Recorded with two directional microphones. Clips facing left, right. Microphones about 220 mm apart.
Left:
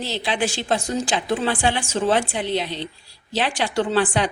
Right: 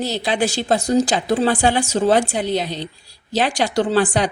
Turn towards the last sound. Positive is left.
turn(degrees=-40)  # may be behind; listen again after turning